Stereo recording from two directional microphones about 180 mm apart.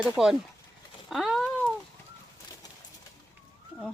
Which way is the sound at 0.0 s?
5° right (ahead or behind).